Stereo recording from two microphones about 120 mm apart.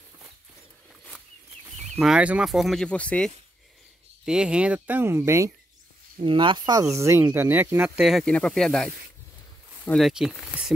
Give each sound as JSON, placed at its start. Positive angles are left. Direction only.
{"t": 1.8, "sound": "speech", "side_deg": 0}
{"t": 4.3, "sound": "speech", "side_deg": -5}
{"t": 6.1, "sound": "speech", "side_deg": -40}
{"t": 6.7, "sound": "speech", "side_deg": -25}
{"t": 8.0, "sound": "speech", "side_deg": 0}
{"t": 9.9, "sound": "speech", "side_deg": 0}